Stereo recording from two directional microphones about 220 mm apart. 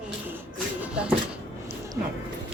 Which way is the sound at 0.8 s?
5° right (ahead or behind).